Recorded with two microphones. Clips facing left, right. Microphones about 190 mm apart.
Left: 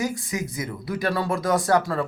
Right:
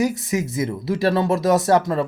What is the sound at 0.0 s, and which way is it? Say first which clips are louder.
Speech: right 6 dB; 25° right (ahead or behind).